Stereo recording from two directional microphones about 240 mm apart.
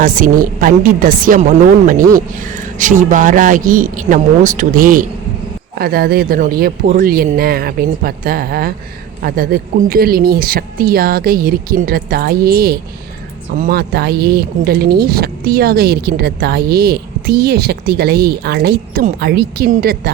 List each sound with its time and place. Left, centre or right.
0.0 s speech: right